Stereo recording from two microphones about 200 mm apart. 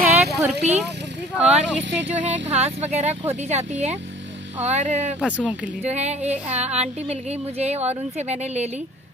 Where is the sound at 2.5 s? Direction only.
30° right (ahead or behind).